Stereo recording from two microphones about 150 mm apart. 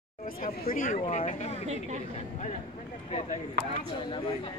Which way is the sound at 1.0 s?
50° left (ahead or behind).